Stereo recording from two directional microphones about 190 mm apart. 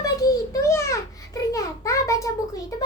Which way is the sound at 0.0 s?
20° left (ahead or behind).